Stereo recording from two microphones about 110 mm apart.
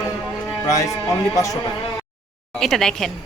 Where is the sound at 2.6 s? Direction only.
5° left (ahead or behind).